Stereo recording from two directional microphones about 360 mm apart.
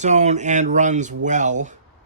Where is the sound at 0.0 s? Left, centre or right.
Centre.